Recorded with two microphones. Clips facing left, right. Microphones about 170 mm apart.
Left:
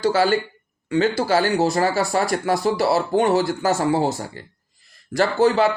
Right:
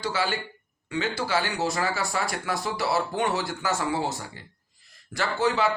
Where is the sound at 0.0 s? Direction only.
45° left (ahead or behind).